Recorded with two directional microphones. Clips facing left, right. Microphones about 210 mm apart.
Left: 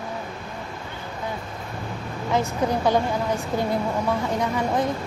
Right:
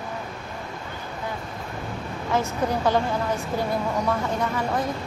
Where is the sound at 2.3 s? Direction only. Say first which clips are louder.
Left 1 dB; 15° left (ahead or behind).